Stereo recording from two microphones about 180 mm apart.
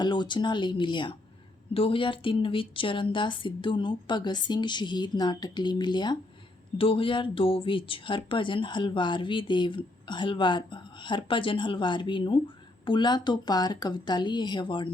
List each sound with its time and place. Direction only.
0.0 s speech: 25° left (ahead or behind)